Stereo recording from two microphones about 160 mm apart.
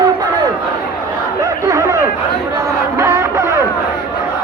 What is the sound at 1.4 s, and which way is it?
Speech, 20° right (ahead or behind).